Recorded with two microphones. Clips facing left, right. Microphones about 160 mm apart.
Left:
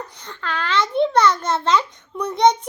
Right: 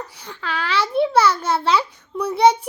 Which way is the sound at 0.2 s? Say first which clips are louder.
Even; 10° right (ahead or behind).